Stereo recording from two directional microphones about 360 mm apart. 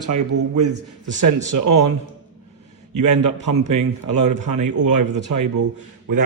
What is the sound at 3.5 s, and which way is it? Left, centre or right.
Speech, right.